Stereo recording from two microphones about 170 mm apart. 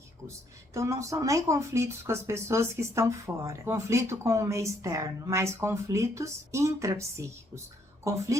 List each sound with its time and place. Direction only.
0.7 s speech: 15° right (ahead or behind)